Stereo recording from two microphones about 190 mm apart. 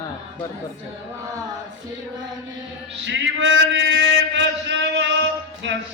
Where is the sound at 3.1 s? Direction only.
75° right (ahead or behind).